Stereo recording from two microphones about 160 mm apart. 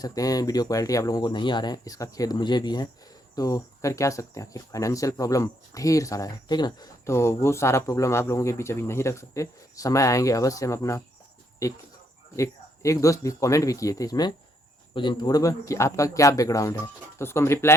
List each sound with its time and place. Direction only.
0.0 s speech: 20° left (ahead or behind)